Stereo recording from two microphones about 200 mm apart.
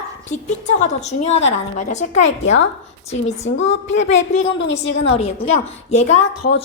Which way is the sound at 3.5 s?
70° left (ahead or behind).